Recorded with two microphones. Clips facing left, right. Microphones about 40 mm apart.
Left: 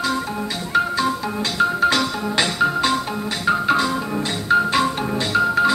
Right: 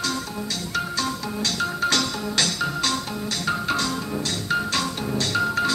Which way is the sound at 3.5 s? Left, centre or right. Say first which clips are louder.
Left 7 dB; centre.